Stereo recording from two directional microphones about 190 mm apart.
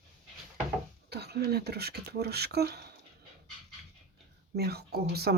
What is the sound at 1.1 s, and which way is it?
Speech, 60° right (ahead or behind).